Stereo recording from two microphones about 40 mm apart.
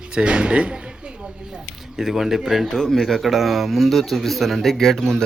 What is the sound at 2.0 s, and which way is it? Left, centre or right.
Speech, centre.